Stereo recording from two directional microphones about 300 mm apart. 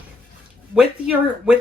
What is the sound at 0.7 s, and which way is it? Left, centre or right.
Speech, centre.